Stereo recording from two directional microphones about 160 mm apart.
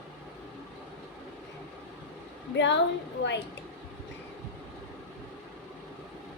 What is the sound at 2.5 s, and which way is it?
Speech, 90° left.